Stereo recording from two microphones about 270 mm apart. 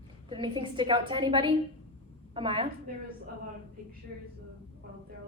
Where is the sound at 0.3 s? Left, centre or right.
Centre.